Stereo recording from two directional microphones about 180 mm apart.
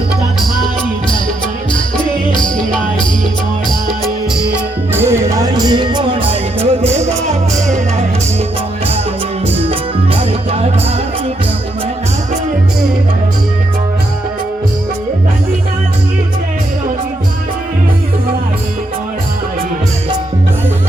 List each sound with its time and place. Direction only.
2.4 s music: 5° left (ahead or behind)
4.4 s music: 10° right (ahead or behind); by 6.7 s 25° right (ahead or behind)
9.6 s music: 30° right (ahead or behind)